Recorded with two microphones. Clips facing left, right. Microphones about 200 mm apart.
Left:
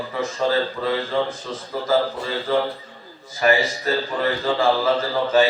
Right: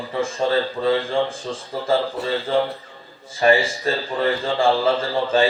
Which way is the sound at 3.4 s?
30° right (ahead or behind).